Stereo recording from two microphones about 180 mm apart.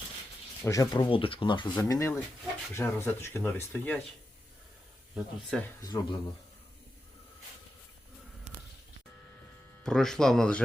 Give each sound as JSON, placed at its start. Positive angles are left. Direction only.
{"t": 0.6, "sound": "speech", "side_deg": 20}
{"t": 5.1, "sound": "speech", "side_deg": 0}
{"t": 5.6, "sound": "speech", "side_deg": 20}
{"t": 9.8, "sound": "speech", "side_deg": 5}